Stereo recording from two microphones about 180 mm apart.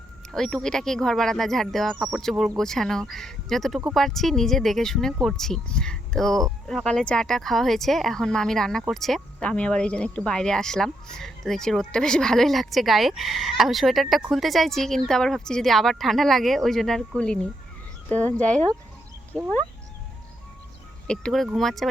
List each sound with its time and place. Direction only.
0.3 s speech: centre (ahead or behind)
21.1 s speech: 5° left (ahead or behind)